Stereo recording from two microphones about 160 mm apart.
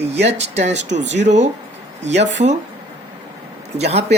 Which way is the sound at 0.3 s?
45° right (ahead or behind).